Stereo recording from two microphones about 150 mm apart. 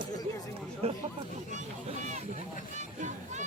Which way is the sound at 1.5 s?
55° right (ahead or behind).